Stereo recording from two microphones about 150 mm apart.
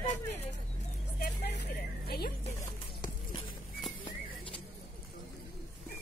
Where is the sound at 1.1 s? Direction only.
90° left.